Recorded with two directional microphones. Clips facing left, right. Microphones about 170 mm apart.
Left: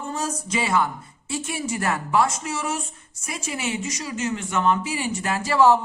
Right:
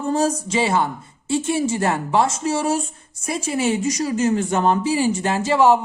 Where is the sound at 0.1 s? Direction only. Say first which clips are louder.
Right 8 dB; 30° right (ahead or behind).